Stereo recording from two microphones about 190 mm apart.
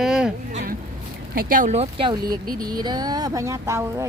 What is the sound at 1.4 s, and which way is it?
Speech, 45° right (ahead or behind).